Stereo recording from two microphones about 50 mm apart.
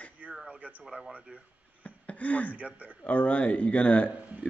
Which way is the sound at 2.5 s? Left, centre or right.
Right.